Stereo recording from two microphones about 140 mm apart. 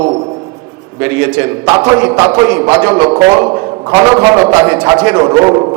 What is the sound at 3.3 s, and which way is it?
Speech, 25° right (ahead or behind).